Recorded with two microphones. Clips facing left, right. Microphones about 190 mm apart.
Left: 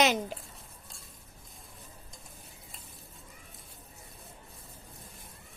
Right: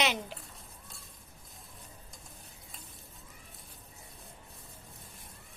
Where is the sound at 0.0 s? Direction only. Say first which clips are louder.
Left 5 dB; 45° left (ahead or behind).